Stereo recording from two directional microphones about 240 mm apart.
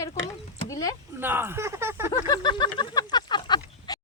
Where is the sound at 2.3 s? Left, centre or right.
Centre.